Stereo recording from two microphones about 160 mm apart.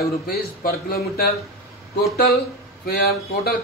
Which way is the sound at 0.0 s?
70° left (ahead or behind).